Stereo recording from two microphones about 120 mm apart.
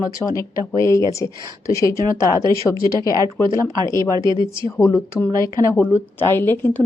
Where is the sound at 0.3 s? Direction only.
30° left (ahead or behind).